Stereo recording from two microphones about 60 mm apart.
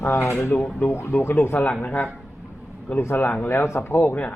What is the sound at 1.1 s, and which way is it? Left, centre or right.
Speech, left.